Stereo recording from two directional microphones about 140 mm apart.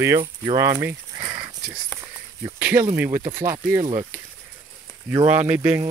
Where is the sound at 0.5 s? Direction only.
20° right (ahead or behind).